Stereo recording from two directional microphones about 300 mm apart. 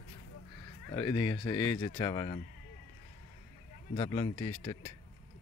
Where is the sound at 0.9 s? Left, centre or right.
Centre.